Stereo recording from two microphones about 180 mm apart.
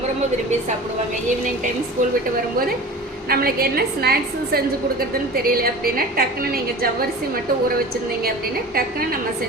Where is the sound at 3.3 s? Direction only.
55° right (ahead or behind).